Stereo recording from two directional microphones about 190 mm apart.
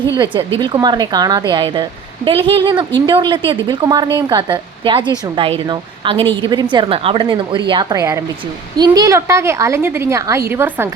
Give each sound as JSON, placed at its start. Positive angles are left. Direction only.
{"t": 0.6, "sound": "a woman's voice", "side_deg": -20}